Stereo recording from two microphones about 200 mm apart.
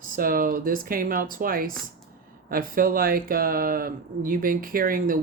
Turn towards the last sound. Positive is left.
turn(degrees=-45)  # may be behind; listen again after turning